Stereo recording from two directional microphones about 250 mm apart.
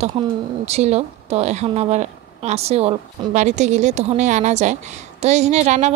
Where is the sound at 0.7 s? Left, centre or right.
Right.